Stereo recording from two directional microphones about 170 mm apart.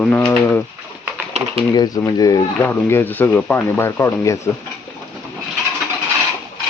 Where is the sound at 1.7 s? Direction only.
20° left (ahead or behind).